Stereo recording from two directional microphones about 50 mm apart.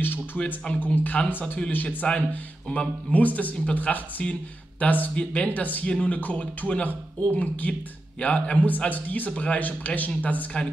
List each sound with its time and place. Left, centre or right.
0.0 s a sound: left
0.8 s speech: left
2.7 s speech: left
5.5 s speech: left